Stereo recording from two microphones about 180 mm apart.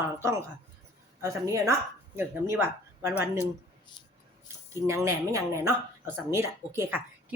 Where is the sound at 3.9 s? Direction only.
25° left (ahead or behind).